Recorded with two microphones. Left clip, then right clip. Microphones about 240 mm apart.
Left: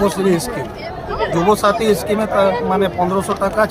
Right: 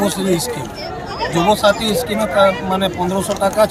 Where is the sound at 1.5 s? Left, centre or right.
Centre.